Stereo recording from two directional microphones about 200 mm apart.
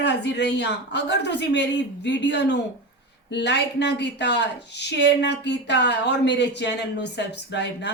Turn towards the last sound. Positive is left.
turn(degrees=60)  # may be behind; listen again after turning